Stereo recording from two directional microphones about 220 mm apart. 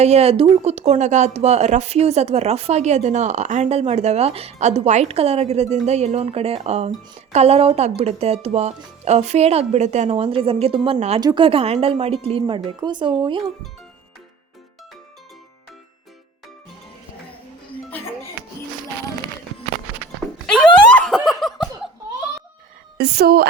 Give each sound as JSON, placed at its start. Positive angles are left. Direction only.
{"t": 0.0, "sound": "speech", "side_deg": -30}
{"t": 20.6, "sound": "snicker", "side_deg": 5}
{"t": 23.0, "sound": "speech", "side_deg": -45}